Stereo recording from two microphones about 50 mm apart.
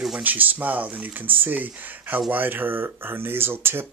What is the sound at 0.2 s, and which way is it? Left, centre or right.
Speech, right.